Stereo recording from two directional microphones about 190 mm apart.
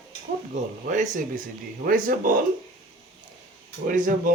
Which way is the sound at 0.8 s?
40° right (ahead or behind).